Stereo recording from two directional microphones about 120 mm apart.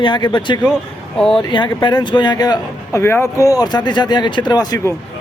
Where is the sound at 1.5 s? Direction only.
40° left (ahead or behind).